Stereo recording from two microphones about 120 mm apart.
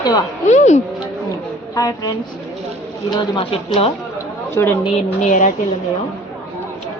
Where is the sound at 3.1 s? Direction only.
45° left (ahead or behind).